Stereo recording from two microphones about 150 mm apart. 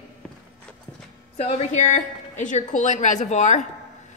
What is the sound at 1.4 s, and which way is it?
A woman's voice, 50° left (ahead or behind).